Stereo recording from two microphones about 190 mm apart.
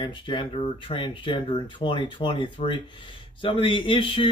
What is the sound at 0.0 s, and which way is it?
Speech, 25° left (ahead or behind).